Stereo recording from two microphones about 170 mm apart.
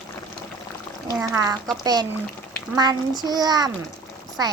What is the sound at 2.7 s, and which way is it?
A child's voice, 25° right (ahead or behind).